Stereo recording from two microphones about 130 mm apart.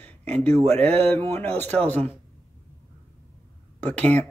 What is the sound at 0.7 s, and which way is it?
Speech, 15° left (ahead or behind).